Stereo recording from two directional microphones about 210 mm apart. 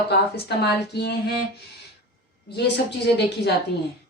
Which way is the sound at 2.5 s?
55° left (ahead or behind).